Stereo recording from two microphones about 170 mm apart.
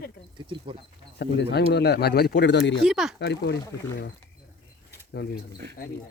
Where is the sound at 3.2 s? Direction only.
80° left.